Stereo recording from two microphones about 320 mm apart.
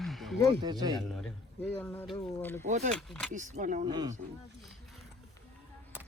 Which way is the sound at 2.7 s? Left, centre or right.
Right.